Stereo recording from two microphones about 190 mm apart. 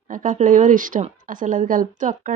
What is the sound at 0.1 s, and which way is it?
Speech, 45° right (ahead or behind).